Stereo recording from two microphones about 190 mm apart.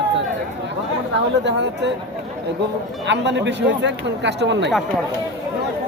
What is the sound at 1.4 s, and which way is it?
Speech, 65° right (ahead or behind).